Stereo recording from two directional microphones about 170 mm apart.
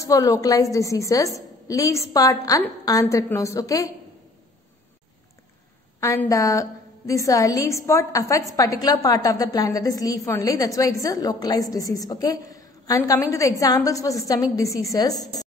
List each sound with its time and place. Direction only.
0.0 s a woman's voice: 20° left (ahead or behind)
5.9 s a woman's voice: 20° left (ahead or behind)